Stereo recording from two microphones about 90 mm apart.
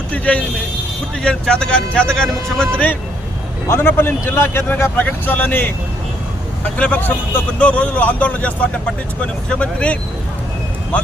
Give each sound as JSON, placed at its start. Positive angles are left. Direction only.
{"t": 0.1, "sound": "vehicle", "side_deg": 15}
{"t": 1.2, "sound": "speech", "side_deg": 10}
{"t": 3.7, "sound": "speech", "side_deg": 25}
{"t": 6.7, "sound": "speech", "side_deg": 15}